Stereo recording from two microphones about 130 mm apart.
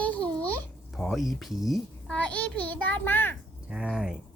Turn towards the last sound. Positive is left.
turn(degrees=-5)  # may be behind; listen again after turning